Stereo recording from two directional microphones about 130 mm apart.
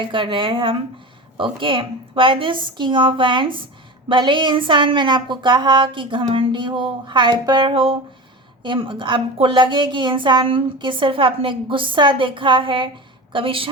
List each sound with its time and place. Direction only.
0.1 s a woman's voice: 40° right (ahead or behind)